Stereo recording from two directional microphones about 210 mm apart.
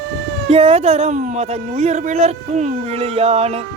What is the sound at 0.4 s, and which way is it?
Speech, 30° right (ahead or behind).